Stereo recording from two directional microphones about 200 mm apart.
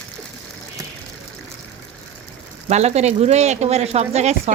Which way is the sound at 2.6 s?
35° right (ahead or behind).